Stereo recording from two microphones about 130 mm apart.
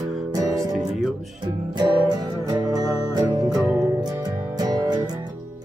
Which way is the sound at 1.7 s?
30° right (ahead or behind).